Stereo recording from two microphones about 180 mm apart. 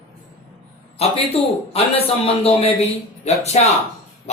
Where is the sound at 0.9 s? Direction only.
35° left (ahead or behind).